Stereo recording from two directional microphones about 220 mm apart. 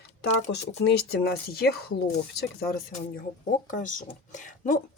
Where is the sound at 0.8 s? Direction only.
45° left (ahead or behind).